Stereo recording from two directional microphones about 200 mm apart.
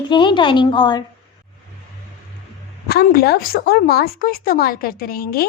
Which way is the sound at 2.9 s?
50° left (ahead or behind).